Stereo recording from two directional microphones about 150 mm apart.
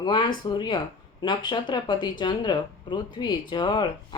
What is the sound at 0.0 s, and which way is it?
Speech, 30° left (ahead or behind).